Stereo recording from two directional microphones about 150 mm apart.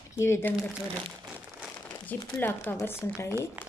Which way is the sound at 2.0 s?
15° left (ahead or behind).